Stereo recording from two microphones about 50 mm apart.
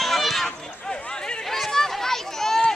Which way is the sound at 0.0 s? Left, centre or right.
Centre.